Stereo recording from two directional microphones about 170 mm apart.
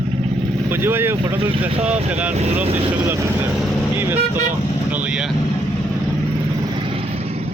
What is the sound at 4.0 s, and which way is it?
Vehicle, 10° right (ahead or behind).